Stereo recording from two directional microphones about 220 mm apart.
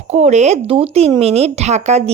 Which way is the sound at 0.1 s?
30° right (ahead or behind).